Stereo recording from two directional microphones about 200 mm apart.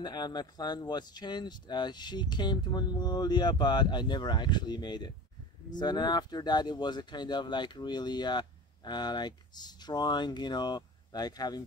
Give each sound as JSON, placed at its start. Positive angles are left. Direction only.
{"t": 0.0, "sound": "speech", "side_deg": 20}